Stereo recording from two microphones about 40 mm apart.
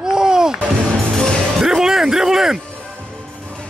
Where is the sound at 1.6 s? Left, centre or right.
Centre.